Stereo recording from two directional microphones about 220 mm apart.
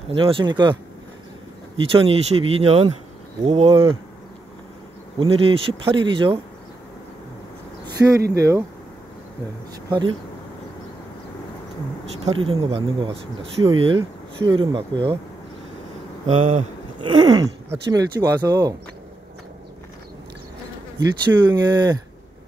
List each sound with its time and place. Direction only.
0.1 s speech: 25° right (ahead or behind)
2.0 s speech: 25° right (ahead or behind)
5.2 s speech: 25° right (ahead or behind)
8.0 s speech: 5° right (ahead or behind)
9.8 s speech: 20° right (ahead or behind)
12.3 s speech: 25° right (ahead or behind)
16.3 s speech: 30° right (ahead or behind)
17.2 s speech: 20° right (ahead or behind)
21.2 s speech: 20° right (ahead or behind)